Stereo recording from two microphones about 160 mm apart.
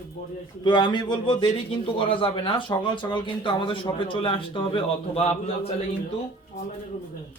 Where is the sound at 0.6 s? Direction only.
30° left (ahead or behind).